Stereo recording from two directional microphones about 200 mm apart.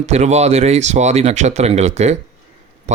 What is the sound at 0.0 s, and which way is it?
Speech, 35° right (ahead or behind).